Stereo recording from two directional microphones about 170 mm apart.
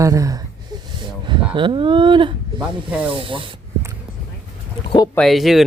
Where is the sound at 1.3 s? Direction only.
30° right (ahead or behind).